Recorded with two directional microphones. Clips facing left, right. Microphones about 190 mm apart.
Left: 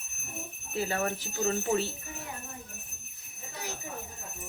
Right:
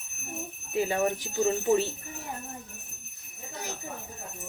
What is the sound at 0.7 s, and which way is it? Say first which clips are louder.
Speech: right 4 dB; 15° right (ahead or behind).